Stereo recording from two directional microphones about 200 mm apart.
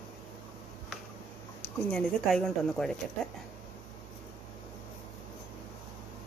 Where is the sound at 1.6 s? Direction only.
5° left (ahead or behind).